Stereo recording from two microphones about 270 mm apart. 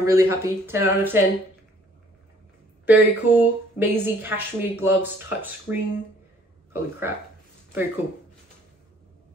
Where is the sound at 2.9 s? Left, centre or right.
Centre.